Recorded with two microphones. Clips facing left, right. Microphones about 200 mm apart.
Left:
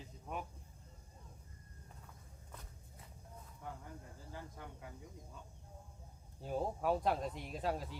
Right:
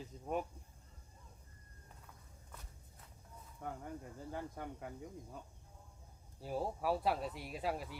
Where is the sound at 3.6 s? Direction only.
55° right (ahead or behind).